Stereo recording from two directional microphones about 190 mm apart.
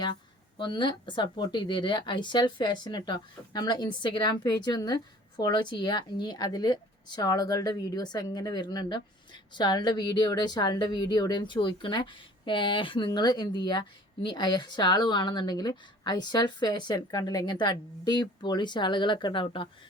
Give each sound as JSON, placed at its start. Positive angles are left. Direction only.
{"t": 0.0, "sound": "speech", "side_deg": 25}